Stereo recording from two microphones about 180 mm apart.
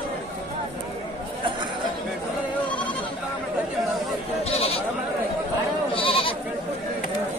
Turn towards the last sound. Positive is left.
turn(degrees=30)  # may be behind; listen again after turning